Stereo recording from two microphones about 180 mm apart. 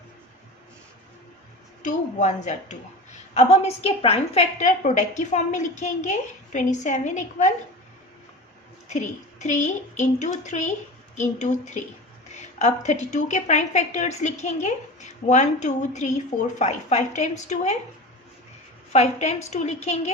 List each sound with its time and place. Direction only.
1.8 s a woman's voice: 40° left (ahead or behind)
8.9 s a woman's voice: 40° left (ahead or behind)
18.9 s a woman's voice: 35° left (ahead or behind)